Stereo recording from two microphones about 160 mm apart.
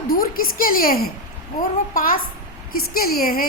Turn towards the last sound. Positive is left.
turn(degrees=70)  # may be behind; listen again after turning